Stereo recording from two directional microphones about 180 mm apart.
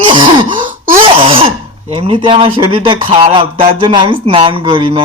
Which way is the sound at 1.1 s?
30° right (ahead or behind).